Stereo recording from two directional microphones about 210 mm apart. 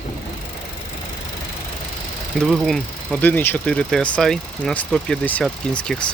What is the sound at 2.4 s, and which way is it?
Speech, centre (ahead or behind).